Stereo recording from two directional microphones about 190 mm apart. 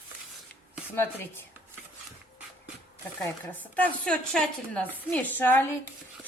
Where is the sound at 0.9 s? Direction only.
10° left (ahead or behind).